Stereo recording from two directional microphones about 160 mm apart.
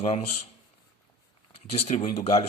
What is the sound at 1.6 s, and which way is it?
Speech, 40° left (ahead or behind).